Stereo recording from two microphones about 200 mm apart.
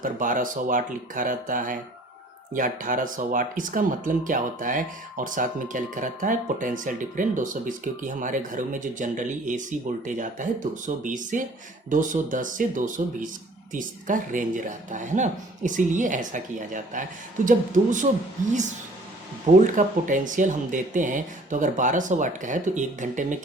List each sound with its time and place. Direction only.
0.0 s speech: 40° right (ahead or behind)
19.5 s speech: 40° right (ahead or behind)